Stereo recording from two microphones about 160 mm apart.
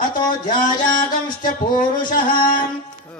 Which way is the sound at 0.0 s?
55° left (ahead or behind).